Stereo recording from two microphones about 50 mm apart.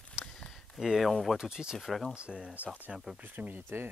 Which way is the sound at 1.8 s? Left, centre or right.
Centre.